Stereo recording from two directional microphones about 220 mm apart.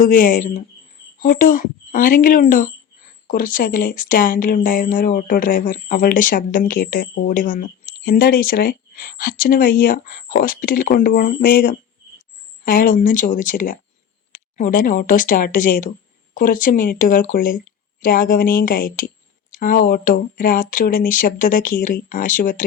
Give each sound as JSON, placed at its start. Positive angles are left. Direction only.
{"t": 0.0, "sound": "speech", "side_deg": 35}